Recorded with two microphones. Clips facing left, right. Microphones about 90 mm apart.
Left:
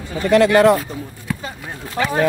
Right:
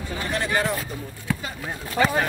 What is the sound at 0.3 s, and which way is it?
Speech, 80° left.